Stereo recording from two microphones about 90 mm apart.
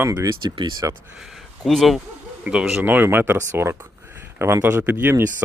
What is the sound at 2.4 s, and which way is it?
Speech, 10° right (ahead or behind).